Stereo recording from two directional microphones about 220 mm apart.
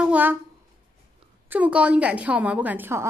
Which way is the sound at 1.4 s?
5° right (ahead or behind).